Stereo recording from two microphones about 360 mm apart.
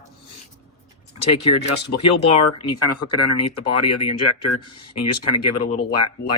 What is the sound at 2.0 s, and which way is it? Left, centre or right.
Speech, left.